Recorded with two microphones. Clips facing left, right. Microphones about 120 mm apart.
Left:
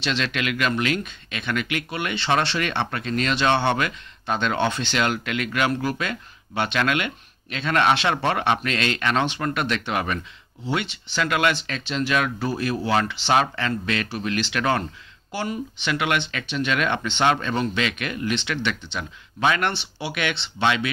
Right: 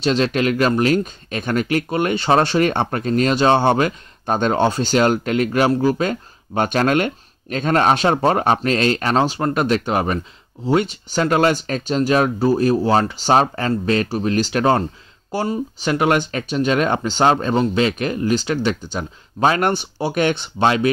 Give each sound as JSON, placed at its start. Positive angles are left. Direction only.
{"t": 0.0, "sound": "speech", "side_deg": -40}